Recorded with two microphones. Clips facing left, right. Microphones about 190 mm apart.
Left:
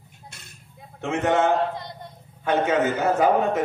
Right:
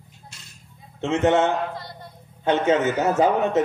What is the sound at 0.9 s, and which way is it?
Speech, 25° right (ahead or behind).